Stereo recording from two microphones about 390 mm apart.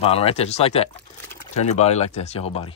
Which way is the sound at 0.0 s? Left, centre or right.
Centre.